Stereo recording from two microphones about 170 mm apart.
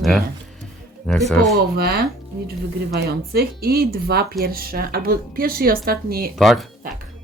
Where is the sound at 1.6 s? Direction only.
65° right (ahead or behind).